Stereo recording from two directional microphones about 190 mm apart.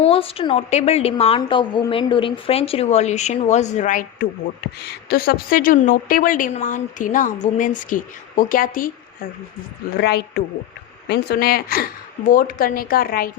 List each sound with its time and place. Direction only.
0.0 s a woman's voice: 30° left (ahead or behind)
4.8 s a woman's voice: 55° left (ahead or behind)
10.0 s a woman's voice: 60° left (ahead or behind)